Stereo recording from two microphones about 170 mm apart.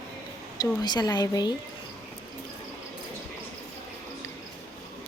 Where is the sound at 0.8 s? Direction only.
25° left (ahead or behind).